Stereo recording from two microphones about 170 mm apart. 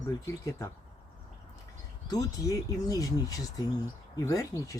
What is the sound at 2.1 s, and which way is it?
Speech, 20° left (ahead or behind).